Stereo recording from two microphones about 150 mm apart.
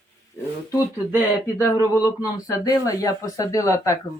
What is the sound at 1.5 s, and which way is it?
Speech, 20° left (ahead or behind).